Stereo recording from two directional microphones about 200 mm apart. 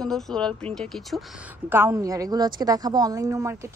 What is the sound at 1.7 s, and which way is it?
Speech, 15° right (ahead or behind).